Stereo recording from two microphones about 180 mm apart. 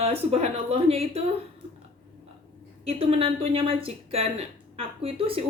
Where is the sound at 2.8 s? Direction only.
35° right (ahead or behind).